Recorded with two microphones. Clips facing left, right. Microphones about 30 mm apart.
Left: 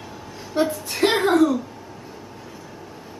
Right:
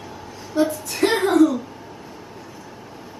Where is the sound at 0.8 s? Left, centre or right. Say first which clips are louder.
Even; centre.